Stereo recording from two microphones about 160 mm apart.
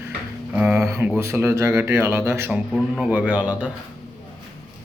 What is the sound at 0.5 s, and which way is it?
Speech, 15° right (ahead or behind).